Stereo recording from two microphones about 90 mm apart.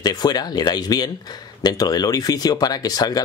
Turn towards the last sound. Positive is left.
turn(degrees=45)  # may be behind; listen again after turning